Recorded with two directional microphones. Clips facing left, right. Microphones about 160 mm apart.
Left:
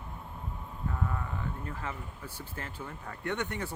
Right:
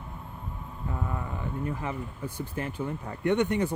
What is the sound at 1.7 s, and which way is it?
Speech, 15° right (ahead or behind).